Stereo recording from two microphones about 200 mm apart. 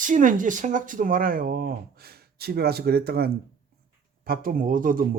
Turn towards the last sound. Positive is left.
turn(degrees=-45)  # may be behind; listen again after turning